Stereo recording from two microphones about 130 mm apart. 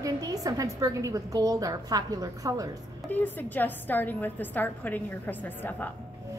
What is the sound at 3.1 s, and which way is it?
A woman's voice, 15° left (ahead or behind).